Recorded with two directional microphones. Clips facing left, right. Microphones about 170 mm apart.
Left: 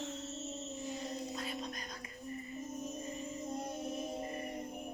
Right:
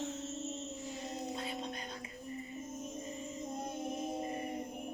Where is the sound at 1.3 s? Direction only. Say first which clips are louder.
Right 1 dB; 25° right (ahead or behind).